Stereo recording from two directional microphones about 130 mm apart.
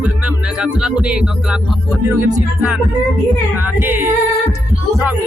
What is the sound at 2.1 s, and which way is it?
Music, 30° right (ahead or behind).